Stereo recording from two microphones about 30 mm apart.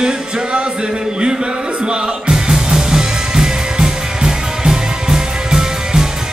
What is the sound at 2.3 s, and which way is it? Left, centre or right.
Music, centre.